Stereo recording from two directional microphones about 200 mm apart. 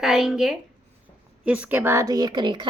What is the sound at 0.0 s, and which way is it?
A woman's voice, centre (ahead or behind).